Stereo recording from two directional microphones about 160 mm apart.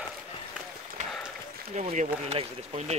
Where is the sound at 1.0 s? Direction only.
50° right (ahead or behind).